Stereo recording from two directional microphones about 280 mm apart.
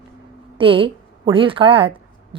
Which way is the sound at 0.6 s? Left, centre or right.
Centre.